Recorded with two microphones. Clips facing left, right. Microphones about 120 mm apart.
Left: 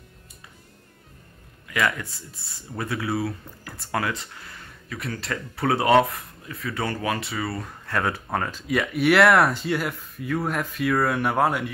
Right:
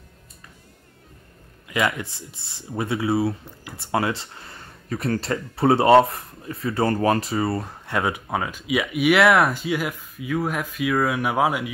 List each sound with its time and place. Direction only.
1.7 s speech: 20° right (ahead or behind)
8.0 s speech: 10° right (ahead or behind)